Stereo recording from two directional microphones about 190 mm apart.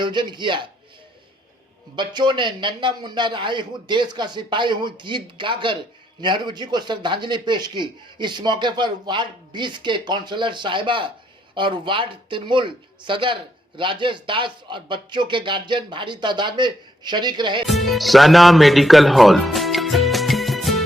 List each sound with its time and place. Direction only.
0.0 s speech: 25° right (ahead or behind)
2.0 s speech: 25° right (ahead or behind)
17.7 s speech: centre (ahead or behind)